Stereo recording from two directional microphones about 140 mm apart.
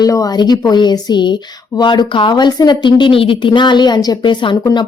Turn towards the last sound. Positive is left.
turn(degrees=30)  # may be behind; listen again after turning